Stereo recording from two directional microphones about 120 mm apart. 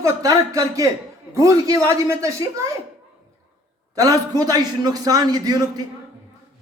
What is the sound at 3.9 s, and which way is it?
Speech, 30° right (ahead or behind).